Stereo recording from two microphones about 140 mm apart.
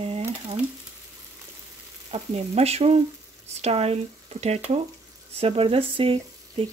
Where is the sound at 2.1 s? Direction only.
45° right (ahead or behind).